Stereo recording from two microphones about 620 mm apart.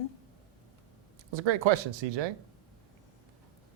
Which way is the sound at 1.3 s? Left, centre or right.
Right.